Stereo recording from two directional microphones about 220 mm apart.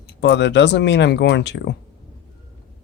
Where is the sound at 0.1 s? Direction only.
50° left (ahead or behind).